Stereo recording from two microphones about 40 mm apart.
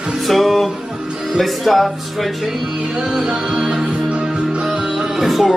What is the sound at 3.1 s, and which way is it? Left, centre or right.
Music, centre.